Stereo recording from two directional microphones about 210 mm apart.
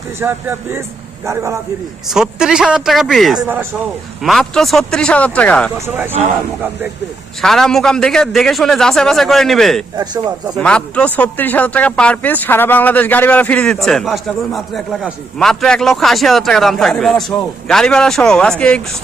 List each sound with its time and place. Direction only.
0.2 s a man's voice: 10° right (ahead or behind)
4.2 s speech: centre (ahead or behind)
5.8 s a man's voice: 10° right (ahead or behind)
7.4 s speech: centre (ahead or behind)
10.0 s a man's voice: 20° right (ahead or behind)
10.6 s speech: 5° left (ahead or behind)